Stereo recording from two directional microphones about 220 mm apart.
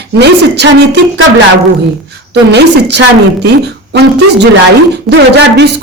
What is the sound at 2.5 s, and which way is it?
A woman's voice, 50° right (ahead or behind).